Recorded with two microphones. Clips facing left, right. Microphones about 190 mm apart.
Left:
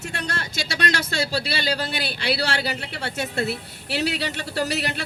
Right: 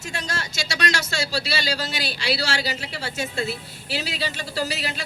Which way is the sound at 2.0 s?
60° left (ahead or behind).